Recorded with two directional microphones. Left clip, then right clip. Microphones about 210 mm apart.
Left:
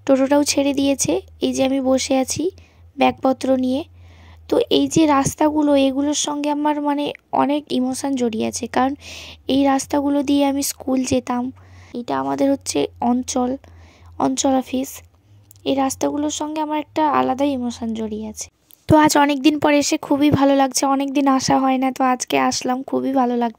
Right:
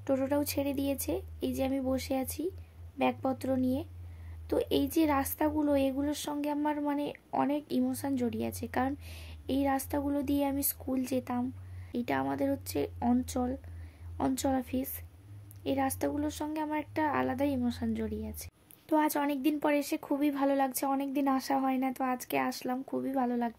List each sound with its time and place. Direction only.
0.0 s speech: 40° left (ahead or behind)
11.9 s speech: 25° left (ahead or behind)
12.3 s speech: 40° left (ahead or behind)
18.9 s speech: 45° left (ahead or behind)